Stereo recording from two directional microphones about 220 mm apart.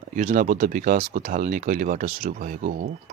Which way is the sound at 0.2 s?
35° right (ahead or behind).